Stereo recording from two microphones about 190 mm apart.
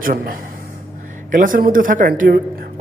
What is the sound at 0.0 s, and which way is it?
A man's voice, 45° right (ahead or behind).